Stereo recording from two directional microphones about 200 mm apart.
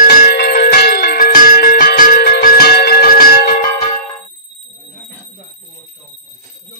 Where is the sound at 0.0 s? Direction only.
50° left (ahead or behind).